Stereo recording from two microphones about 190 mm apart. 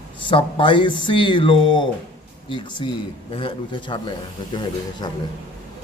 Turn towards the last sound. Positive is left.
turn(degrees=20)  # may be behind; listen again after turning